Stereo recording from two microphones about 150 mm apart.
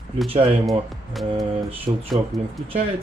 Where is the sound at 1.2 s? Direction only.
Centre (ahead or behind).